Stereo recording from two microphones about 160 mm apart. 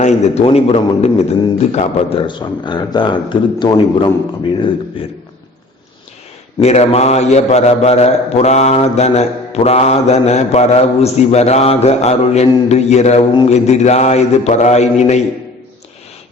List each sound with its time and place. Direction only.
0.0 s a man's voice: 45° left (ahead or behind)
6.6 s a man's voice: 45° left (ahead or behind)